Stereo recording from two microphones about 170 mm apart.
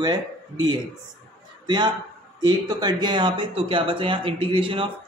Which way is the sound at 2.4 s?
25° right (ahead or behind).